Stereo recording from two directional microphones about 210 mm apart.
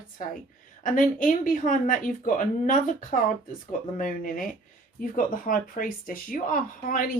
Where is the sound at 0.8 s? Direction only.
40° left (ahead or behind).